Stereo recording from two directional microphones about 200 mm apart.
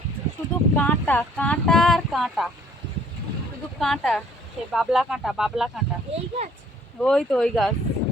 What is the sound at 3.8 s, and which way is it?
Speech, centre (ahead or behind).